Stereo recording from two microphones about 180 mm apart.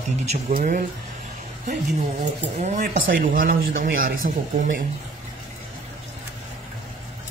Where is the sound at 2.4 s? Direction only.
40° right (ahead or behind).